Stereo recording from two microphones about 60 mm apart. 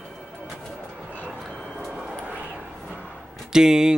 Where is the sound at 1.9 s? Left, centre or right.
Centre.